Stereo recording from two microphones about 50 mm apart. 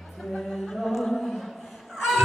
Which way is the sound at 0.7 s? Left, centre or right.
Centre.